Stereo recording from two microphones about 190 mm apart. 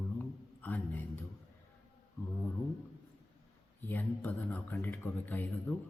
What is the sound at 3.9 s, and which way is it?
Speech, 10° left (ahead or behind).